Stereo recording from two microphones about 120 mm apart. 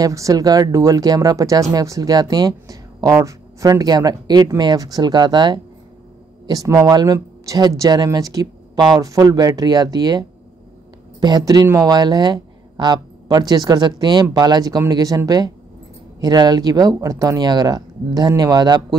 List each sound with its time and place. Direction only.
0.0 s speech: 30° right (ahead or behind)